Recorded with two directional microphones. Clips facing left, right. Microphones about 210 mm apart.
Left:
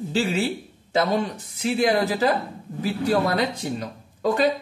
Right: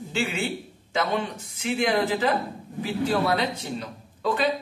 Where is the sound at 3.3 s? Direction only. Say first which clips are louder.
Left 2 dB; 45° left (ahead or behind).